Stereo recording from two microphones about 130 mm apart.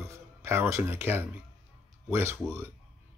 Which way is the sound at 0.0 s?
20° right (ahead or behind).